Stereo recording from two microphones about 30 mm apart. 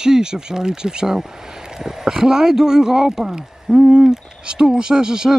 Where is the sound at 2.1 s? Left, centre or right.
Right.